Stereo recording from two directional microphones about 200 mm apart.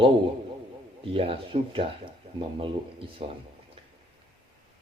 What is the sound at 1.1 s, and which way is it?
Speech, 25° right (ahead or behind).